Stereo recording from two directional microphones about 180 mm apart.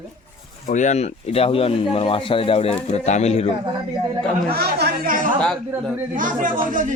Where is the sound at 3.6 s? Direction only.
25° right (ahead or behind).